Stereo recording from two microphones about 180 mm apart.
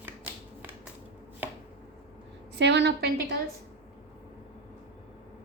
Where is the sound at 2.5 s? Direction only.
70° right (ahead or behind).